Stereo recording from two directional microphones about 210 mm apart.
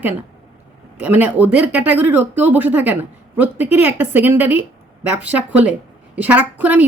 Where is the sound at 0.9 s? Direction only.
10° right (ahead or behind).